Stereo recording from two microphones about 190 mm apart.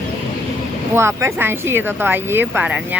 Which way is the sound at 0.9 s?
10° right (ahead or behind).